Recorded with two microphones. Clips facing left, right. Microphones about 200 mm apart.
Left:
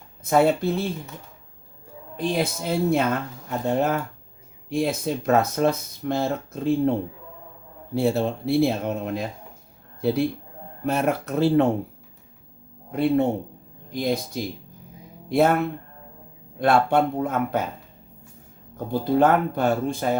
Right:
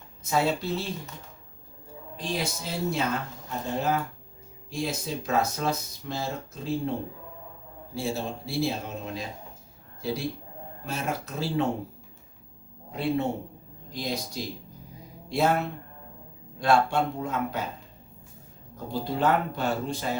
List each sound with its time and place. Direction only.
0.3 s speech: 55° left (ahead or behind)
2.1 s speech: 55° left (ahead or behind)
7.9 s speech: 60° left (ahead or behind)
12.9 s speech: 55° left (ahead or behind)
16.6 s speech: 55° left (ahead or behind)
18.9 s speech: 55° left (ahead or behind)